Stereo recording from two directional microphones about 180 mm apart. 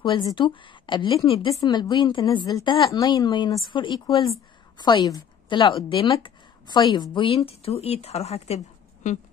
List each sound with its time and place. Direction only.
0.0 s a woman's voice: 25° left (ahead or behind); by 9.2 s 40° left (ahead or behind)